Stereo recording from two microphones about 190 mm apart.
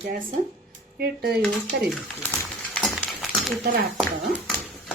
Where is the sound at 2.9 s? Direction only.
Centre (ahead or behind).